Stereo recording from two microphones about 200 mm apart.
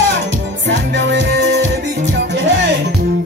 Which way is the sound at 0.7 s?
65° right (ahead or behind).